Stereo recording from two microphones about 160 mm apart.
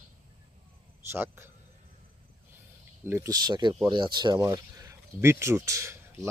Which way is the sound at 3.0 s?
15° right (ahead or behind).